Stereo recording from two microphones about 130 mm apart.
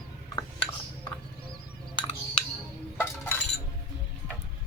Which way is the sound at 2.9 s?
15° left (ahead or behind).